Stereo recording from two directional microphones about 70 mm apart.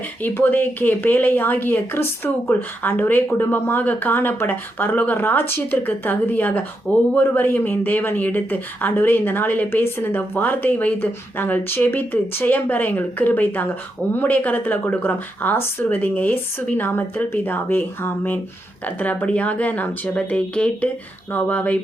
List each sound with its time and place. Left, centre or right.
0.2 s speech: left